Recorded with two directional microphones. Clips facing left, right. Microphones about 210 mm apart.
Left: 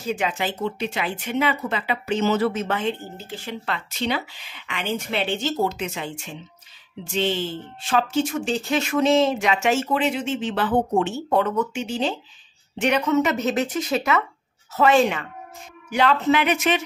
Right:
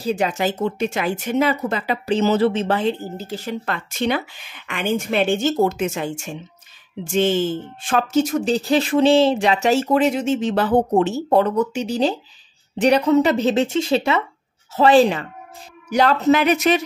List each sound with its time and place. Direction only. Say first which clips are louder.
0.0 s speech: right 5 dB; 40° right (ahead or behind)